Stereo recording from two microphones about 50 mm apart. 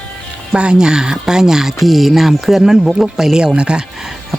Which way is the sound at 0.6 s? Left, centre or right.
Centre.